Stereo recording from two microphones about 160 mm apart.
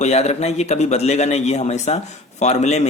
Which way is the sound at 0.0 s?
45° left (ahead or behind).